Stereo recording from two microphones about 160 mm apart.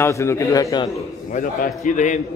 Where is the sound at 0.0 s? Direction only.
15° left (ahead or behind).